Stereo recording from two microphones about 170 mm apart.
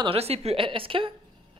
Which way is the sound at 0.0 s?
35° right (ahead or behind).